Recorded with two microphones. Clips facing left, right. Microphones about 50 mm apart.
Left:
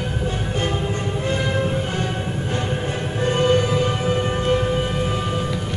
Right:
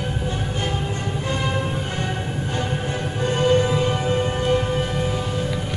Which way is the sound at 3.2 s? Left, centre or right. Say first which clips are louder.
Left 1 dB; left.